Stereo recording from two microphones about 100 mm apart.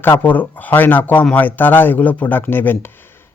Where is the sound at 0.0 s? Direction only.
20° left (ahead or behind).